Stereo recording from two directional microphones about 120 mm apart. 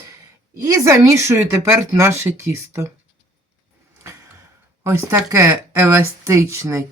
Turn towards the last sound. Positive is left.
turn(degrees=-25)  # may be behind; listen again after turning